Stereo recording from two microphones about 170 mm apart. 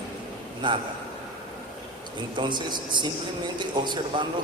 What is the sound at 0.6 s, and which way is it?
Speech, 25° right (ahead or behind).